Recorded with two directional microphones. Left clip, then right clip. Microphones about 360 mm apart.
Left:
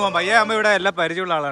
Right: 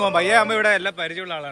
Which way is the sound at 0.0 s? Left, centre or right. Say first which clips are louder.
Even; centre.